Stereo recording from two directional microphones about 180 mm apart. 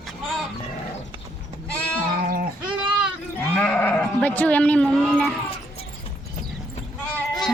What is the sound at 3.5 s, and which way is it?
Speech, 10° left (ahead or behind).